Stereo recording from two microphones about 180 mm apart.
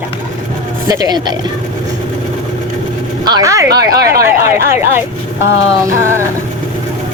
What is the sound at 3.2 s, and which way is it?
Speech, 20° right (ahead or behind).